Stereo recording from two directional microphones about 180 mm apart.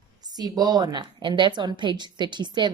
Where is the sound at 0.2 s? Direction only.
20° right (ahead or behind).